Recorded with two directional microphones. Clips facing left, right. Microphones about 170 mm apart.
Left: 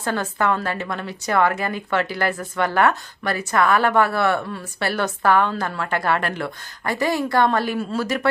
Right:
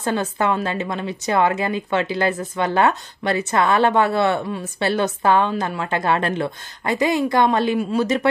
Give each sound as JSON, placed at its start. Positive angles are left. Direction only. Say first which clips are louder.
{"t": 0.0, "sound": "a woman's voice", "louder": "right 2 dB", "side_deg": -20}